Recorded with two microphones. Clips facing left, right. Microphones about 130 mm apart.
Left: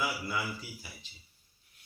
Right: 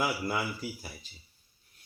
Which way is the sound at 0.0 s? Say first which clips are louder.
Right 4 dB; 45° right (ahead or behind).